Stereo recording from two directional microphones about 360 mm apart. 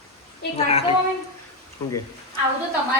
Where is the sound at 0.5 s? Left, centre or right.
Centre.